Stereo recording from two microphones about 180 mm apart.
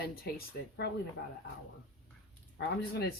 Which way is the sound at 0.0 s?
55° left (ahead or behind).